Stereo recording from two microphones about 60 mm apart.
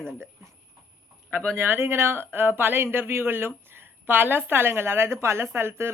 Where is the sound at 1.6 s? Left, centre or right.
Right.